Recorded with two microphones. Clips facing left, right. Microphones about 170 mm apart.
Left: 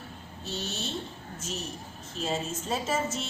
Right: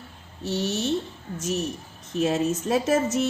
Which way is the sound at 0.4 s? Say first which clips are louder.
Right 10 dB; 70° right (ahead or behind).